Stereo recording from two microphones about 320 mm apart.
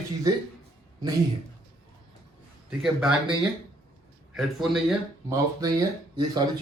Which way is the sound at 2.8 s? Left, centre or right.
Centre.